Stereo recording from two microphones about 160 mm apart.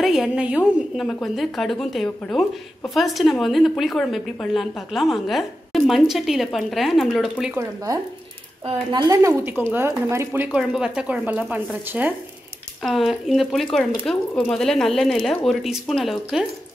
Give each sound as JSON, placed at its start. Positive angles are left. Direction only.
{"t": 0.0, "sound": "speech", "side_deg": 0}
{"t": 7.5, "sound": "speech", "side_deg": -20}